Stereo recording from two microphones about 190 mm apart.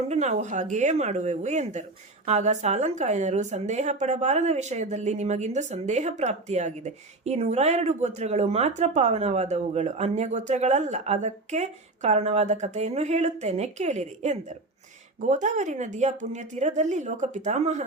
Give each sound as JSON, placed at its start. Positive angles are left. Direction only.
{"t": 0.1, "sound": "a woman's voice", "side_deg": -35}